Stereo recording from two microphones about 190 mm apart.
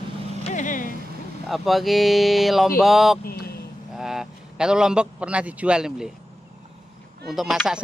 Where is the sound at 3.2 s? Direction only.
55° left (ahead or behind).